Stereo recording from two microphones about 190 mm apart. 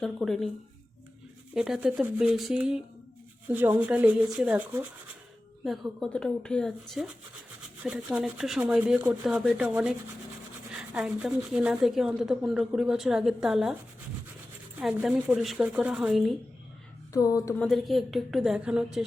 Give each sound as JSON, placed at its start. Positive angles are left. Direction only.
{"t": 0.0, "sound": "a woman's voice", "side_deg": 0}
{"t": 1.5, "sound": "a woman's voice", "side_deg": -5}
{"t": 14.8, "sound": "a woman's voice", "side_deg": -5}
{"t": 17.1, "sound": "a sound", "side_deg": 20}
{"t": 17.6, "sound": "a woman's voice", "side_deg": 0}